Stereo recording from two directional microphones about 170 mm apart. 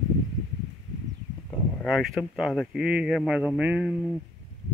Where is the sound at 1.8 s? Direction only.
Centre (ahead or behind).